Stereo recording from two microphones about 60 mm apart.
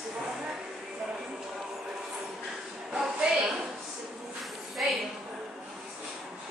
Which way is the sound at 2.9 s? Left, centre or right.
Centre.